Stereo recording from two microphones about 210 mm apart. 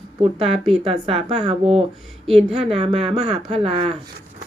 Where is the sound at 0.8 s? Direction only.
25° right (ahead or behind).